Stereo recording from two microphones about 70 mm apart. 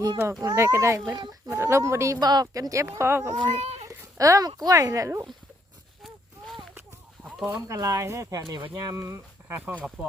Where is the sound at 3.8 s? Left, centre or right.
Right.